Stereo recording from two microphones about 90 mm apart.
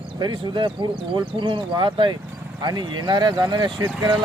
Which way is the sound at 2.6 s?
45° right (ahead or behind).